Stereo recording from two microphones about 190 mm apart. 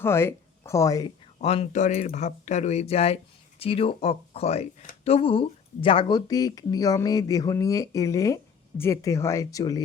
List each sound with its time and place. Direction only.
0.0 s speech: 15° left (ahead or behind)
1.4 s speech: 35° left (ahead or behind); by 9.8 s 20° left (ahead or behind)